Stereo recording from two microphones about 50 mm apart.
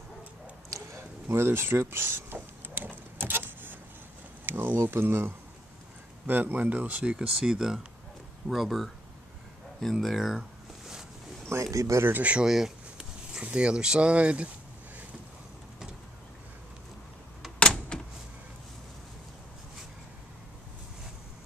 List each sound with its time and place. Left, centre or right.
0.7 s a sound: right
1.3 s a sound: right
4.8 s speech: right
7.2 s speech: centre
8.5 s speech: centre
10.0 s speech: centre
11.4 s speech: right
12.2 s speech: right
12.4 s speech: centre; by 14.5 s right
17.6 s power windows: centre